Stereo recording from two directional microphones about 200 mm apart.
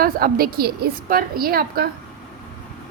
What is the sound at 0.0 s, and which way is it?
A woman's voice, 50° right (ahead or behind).